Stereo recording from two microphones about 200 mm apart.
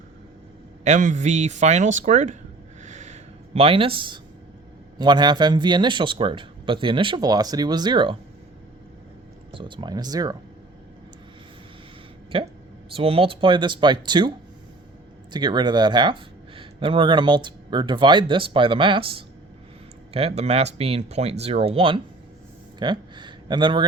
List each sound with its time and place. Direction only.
0.9 s speech: 40° right (ahead or behind)
2.8 s a sound: 35° right (ahead or behind)
4.9 s speech: 20° right (ahead or behind)
9.5 s speech: 25° right (ahead or behind)
12.3 s speech: 25° right (ahead or behind)